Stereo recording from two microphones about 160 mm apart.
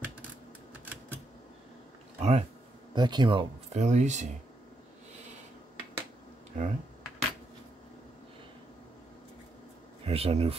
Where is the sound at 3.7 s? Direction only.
45° right (ahead or behind).